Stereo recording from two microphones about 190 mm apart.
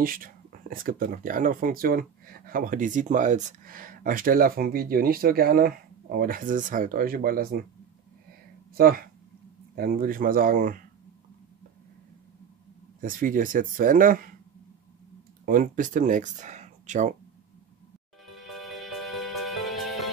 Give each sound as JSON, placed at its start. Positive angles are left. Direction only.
{"t": 0.0, "sound": "speech", "side_deg": -50}
{"t": 8.7, "sound": "speech", "side_deg": -50}
{"t": 13.0, "sound": "speech", "side_deg": -45}
{"t": 15.4, "sound": "speech", "side_deg": -45}
{"t": 18.3, "sound": "music", "side_deg": 0}